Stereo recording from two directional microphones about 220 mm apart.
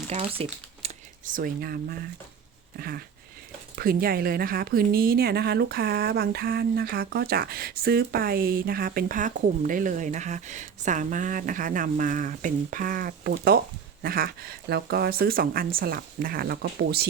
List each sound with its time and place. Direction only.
0.1 s speech: 25° right (ahead or behind); by 2.0 s 45° right (ahead or behind)
2.7 s a sound: 45° right (ahead or behind)
3.8 s a woman's voice: 40° right (ahead or behind)